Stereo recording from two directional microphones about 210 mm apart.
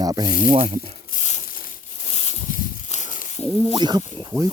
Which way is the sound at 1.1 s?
35° left (ahead or behind).